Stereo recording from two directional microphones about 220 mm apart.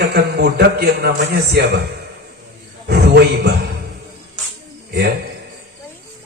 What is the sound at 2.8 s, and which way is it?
Speech, 50° right (ahead or behind).